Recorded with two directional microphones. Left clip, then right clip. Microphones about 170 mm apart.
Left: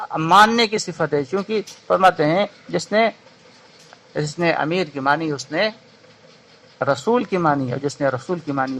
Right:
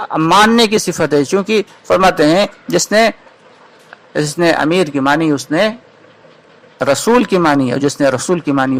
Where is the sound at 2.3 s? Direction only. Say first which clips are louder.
Right 7 dB; 15° right (ahead or behind).